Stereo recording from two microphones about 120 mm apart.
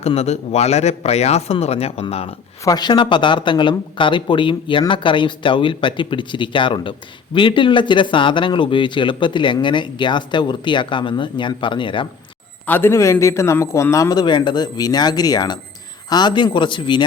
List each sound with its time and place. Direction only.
0.0 s a man's voice: 60° left (ahead or behind)
2.6 s speech: 35° left (ahead or behind)
12.6 s a man's voice: 15° left (ahead or behind); by 17.0 s 40° left (ahead or behind)